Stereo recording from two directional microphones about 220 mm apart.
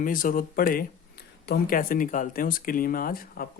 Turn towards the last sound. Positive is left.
turn(degrees=40)  # may be behind; listen again after turning